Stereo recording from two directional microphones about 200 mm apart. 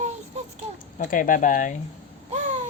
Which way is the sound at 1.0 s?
40° left (ahead or behind).